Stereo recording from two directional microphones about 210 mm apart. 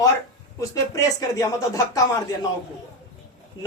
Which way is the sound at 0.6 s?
15° left (ahead or behind).